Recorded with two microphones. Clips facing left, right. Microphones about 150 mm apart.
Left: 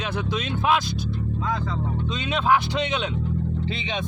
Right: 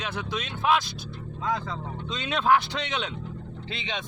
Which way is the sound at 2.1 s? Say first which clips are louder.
Left 1 dB; 5° left (ahead or behind).